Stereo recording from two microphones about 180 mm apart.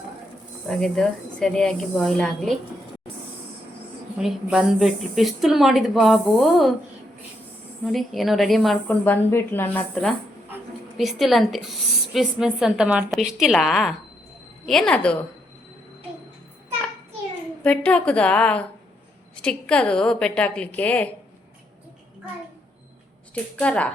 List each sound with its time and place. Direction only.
0.7 s speech: 5° left (ahead or behind)
4.2 s speech: 5° right (ahead or behind)
7.9 s speech: centre (ahead or behind)
17.6 s a woman's voice: 5° left (ahead or behind)
23.3 s a woman's voice: 5° left (ahead or behind)